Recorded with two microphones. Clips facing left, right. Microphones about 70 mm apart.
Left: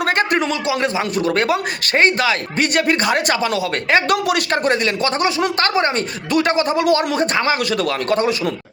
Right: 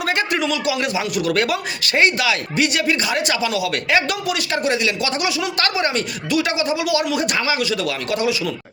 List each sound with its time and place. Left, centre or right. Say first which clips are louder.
0.2 s a man's voice: left 3 dB; left